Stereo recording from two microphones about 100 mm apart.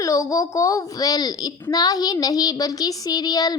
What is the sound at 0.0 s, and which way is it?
A child's voice, 35° left (ahead or behind).